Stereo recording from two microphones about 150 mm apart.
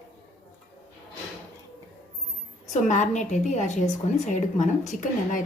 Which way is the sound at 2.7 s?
55° left (ahead or behind).